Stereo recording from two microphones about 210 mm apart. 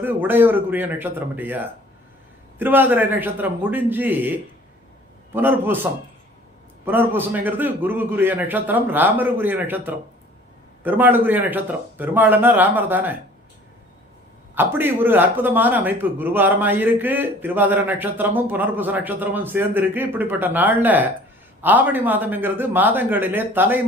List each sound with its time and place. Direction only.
0.0 s a man's voice: 10° right (ahead or behind)
6.8 s a man's voice: 10° right (ahead or behind)
14.5 s a man's voice: 10° right (ahead or behind)